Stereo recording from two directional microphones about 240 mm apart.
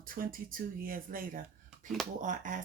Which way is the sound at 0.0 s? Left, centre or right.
Right.